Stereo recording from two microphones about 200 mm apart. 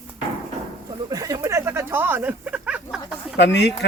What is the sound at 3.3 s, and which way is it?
Speech, 60° left (ahead or behind).